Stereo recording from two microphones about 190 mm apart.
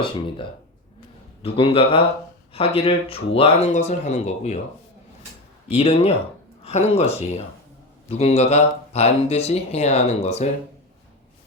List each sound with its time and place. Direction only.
1.4 s a man's voice: 30° left (ahead or behind)
5.6 s speech: 30° left (ahead or behind)